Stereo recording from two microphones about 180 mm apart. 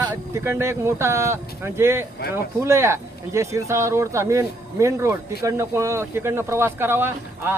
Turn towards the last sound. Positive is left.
turn(degrees=-15)  # may be behind; listen again after turning